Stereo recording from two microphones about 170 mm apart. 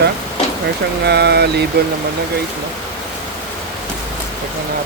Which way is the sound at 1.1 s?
75° right (ahead or behind).